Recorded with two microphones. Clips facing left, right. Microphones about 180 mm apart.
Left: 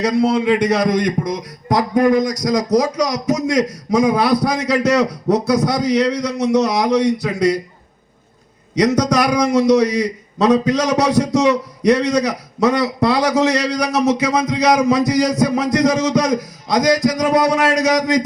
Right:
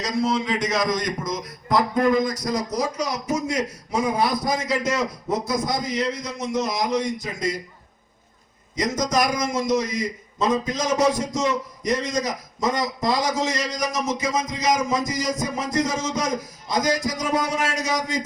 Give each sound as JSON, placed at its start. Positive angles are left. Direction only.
{"t": 0.0, "sound": "a man's voice", "side_deg": 65}
{"t": 8.7, "sound": "a man's voice", "side_deg": 70}